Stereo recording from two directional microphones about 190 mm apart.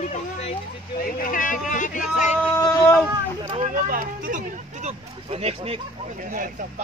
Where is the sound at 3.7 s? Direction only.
45° right (ahead or behind).